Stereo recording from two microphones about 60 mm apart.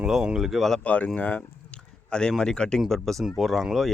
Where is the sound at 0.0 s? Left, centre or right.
Centre.